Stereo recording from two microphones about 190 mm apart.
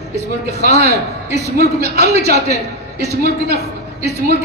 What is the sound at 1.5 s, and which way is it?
A man's voice, 60° right (ahead or behind).